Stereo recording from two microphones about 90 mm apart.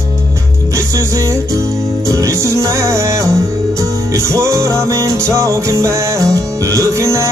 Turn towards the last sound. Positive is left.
turn(degrees=-35)  # may be behind; listen again after turning